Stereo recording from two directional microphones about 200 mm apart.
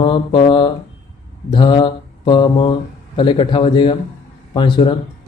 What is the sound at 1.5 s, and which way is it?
Speech, 25° left (ahead or behind).